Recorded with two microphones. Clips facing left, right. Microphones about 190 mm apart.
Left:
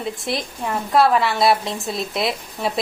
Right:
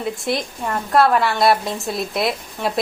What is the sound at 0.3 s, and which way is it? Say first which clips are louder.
A woman's voice: right 1 dB; centre (ahead or behind).